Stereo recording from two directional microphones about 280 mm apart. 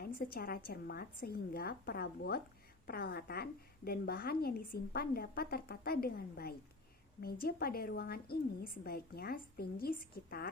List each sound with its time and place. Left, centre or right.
0.0 s a woman's voice: left